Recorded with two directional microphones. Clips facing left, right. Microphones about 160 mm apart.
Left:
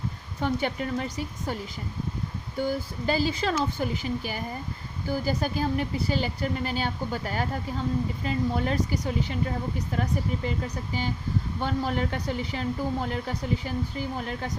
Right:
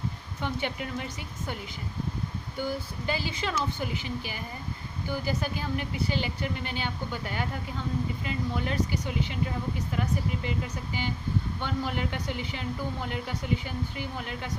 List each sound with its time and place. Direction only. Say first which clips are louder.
0.4 s speech: left 5 dB; 40° left (ahead or behind)
2.6 s speech: left 4 dB; 40° left (ahead or behind)
11.6 s speech: left 6 dB; 40° left (ahead or behind)